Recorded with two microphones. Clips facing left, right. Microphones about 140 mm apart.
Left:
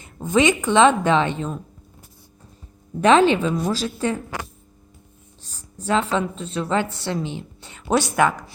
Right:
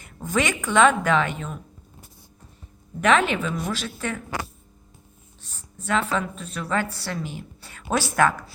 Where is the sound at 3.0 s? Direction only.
30° left (ahead or behind).